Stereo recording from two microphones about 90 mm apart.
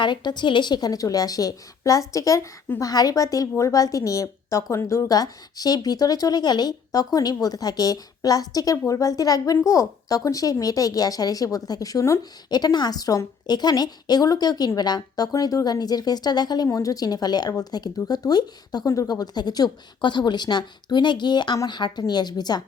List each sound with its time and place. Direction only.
0.0 s a woman's voice: 60° left (ahead or behind); by 12.2 s 35° left (ahead or behind)
12.5 s a woman's voice: 50° left (ahead or behind)
16.6 s a woman's voice: 40° left (ahead or behind)